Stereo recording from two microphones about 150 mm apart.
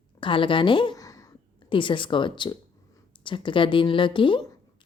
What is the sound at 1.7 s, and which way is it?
A woman's voice, 35° left (ahead or behind).